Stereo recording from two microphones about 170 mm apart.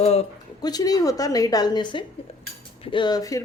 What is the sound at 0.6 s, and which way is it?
A woman's voice, 20° left (ahead or behind).